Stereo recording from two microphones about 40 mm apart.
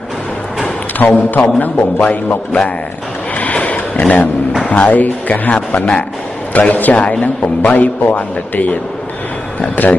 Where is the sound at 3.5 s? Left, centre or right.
Left.